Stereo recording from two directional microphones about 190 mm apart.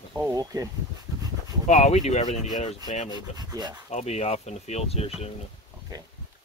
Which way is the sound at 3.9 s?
35° left (ahead or behind).